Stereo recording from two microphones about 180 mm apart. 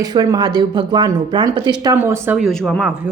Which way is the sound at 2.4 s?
Centre (ahead or behind).